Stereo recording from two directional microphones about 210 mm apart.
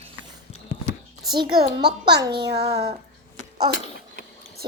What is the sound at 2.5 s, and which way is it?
Speech, 50° right (ahead or behind).